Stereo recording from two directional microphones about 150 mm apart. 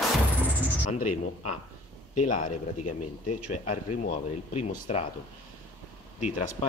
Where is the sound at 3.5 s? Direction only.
55° left (ahead or behind).